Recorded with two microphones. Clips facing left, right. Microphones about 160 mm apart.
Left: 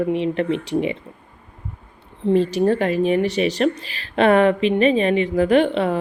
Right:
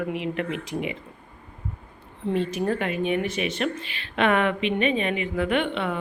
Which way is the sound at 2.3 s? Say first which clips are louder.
Left 7 dB; 35° left (ahead or behind).